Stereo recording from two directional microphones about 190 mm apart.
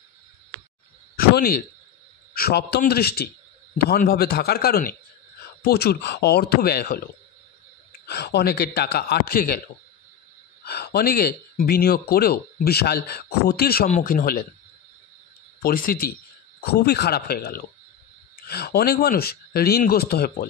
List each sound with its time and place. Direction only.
1.1 s a sound: 50° left (ahead or behind)
2.3 s a man's voice: 55° left (ahead or behind)
8.1 s speech: 60° left (ahead or behind)
10.6 s speech: 60° left (ahead or behind)
13.8 s a man's voice: 45° left (ahead or behind)
15.6 s a man's voice: 50° left (ahead or behind)